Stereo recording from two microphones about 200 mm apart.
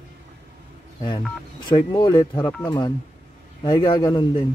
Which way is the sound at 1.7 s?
20° left (ahead or behind).